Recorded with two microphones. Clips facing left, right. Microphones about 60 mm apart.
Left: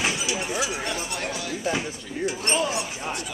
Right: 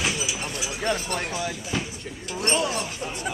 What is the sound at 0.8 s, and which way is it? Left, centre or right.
Speech, right.